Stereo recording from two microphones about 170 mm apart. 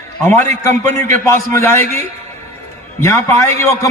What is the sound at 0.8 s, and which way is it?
Speech, 15° left (ahead or behind).